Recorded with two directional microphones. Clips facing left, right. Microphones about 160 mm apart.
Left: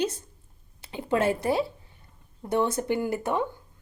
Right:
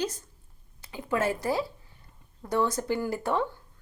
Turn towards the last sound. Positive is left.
turn(degrees=20)  # may be behind; listen again after turning